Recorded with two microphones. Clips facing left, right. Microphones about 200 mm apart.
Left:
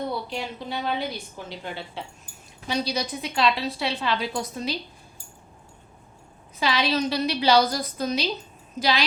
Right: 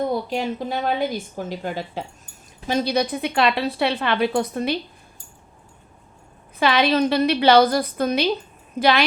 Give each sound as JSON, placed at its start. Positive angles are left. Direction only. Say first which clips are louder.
{"t": 0.0, "sound": "a woman's voice", "louder": "right 7 dB", "side_deg": -45}
{"t": 6.6, "sound": "a woman's voice", "louder": "right 6 dB", "side_deg": -60}